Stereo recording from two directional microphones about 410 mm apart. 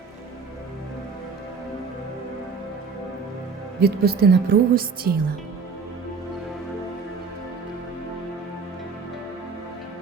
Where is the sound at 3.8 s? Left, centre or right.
Right.